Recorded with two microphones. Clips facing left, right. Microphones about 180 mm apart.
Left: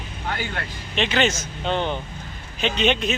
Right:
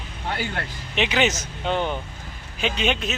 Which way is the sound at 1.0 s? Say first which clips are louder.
Even; 15° right (ahead or behind).